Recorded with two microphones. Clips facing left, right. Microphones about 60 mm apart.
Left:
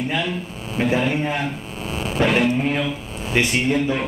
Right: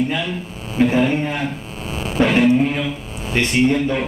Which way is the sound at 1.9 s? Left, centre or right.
Centre.